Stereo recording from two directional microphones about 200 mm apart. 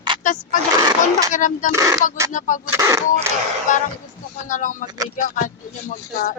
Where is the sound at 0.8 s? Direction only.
20° right (ahead or behind).